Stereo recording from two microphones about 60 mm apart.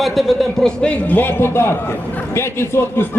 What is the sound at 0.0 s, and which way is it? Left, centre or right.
Speech, centre.